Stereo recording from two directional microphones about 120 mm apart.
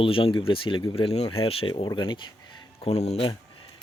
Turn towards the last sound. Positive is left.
turn(degrees=60)  # may be behind; listen again after turning